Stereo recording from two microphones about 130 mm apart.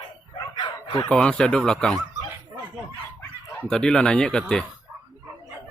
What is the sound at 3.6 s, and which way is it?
Speech, 5° left (ahead or behind).